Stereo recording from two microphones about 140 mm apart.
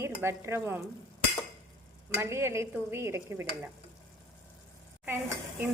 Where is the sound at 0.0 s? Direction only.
20° right (ahead or behind).